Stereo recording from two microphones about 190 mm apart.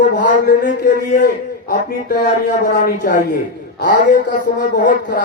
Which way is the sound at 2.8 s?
45° left (ahead or behind).